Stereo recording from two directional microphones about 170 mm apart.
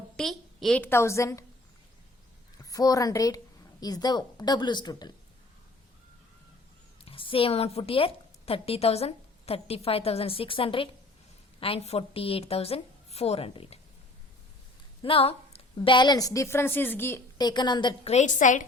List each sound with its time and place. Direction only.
0.2 s a woman's voice: 5° left (ahead or behind)
2.6 s a woman's voice: 20° left (ahead or behind)
7.0 s a woman's voice: 30° left (ahead or behind)
15.0 s a woman's voice: 35° left (ahead or behind); by 17.2 s 10° left (ahead or behind)
17.3 s a woman's voice: 25° left (ahead or behind)
18.1 s a woman's voice: 45° left (ahead or behind)